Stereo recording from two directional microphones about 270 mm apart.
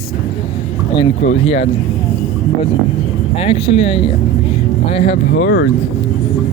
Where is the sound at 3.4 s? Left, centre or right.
Left.